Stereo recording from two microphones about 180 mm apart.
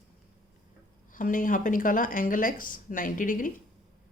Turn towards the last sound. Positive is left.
turn(degrees=50)  # may be behind; listen again after turning